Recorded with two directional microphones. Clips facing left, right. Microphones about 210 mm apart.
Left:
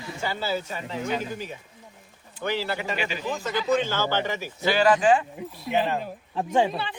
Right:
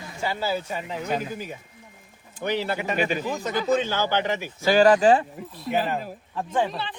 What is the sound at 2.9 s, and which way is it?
Speech, 50° right (ahead or behind).